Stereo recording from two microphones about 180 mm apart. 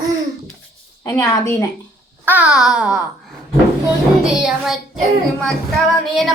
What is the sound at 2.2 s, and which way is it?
Speech, 10° right (ahead or behind).